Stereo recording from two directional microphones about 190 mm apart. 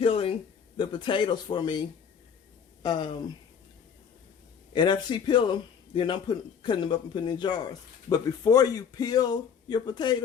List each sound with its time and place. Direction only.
0.0 s a sound: 30° left (ahead or behind)
0.8 s a man's voice: 25° left (ahead or behind)
4.7 s a man's voice: 25° left (ahead or behind)